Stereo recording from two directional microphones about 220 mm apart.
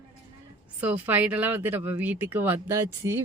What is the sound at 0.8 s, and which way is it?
Speech, 10° right (ahead or behind).